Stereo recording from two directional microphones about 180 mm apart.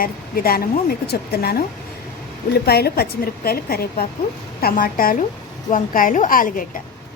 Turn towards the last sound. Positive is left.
turn(degrees=50)  # may be behind; listen again after turning